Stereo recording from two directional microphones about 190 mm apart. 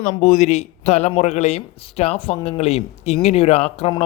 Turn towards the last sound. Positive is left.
turn(degrees=30)  # may be behind; listen again after turning